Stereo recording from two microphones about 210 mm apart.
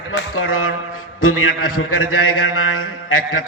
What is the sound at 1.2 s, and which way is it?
A man's voice, 85° left.